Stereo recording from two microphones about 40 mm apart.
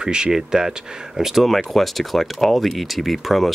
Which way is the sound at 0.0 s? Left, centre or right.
Centre.